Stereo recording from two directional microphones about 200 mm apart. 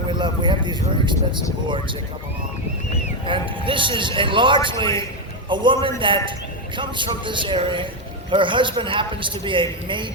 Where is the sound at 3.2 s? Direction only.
25° right (ahead or behind).